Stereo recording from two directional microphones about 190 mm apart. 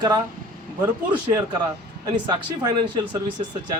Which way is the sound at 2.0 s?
20° right (ahead or behind).